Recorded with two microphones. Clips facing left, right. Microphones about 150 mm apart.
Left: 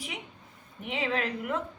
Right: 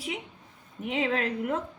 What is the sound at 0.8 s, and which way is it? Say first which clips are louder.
Speech: right 3 dB; 40° right (ahead or behind).